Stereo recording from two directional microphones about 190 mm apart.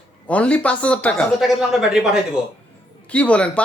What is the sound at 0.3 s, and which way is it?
Speech, 5° left (ahead or behind).